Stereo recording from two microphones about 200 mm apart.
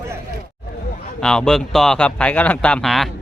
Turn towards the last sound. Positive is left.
turn(degrees=0)  # may be behind; listen again after turning